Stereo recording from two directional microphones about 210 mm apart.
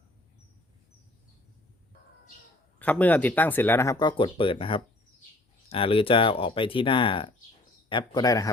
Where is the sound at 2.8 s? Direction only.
5° left (ahead or behind).